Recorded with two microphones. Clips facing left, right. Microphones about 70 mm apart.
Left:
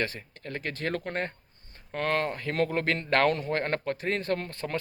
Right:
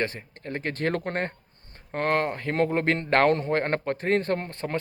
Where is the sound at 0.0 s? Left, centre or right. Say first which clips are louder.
Right 3 dB; right.